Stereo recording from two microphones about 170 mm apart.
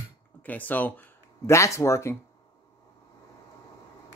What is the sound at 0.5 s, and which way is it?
Speech, 10° left (ahead or behind).